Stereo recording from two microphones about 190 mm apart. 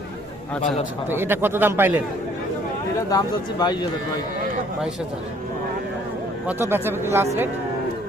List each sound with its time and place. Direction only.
1.1 s speech: 10° right (ahead or behind)
3.1 s speech: 20° left (ahead or behind)
6.5 s speech: 10° right (ahead or behind)